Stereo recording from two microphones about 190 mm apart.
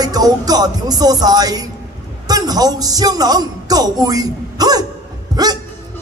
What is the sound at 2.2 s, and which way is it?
A man's voice, 20° right (ahead or behind).